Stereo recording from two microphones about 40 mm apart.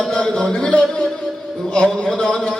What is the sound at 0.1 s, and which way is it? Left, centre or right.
A man's voice, centre.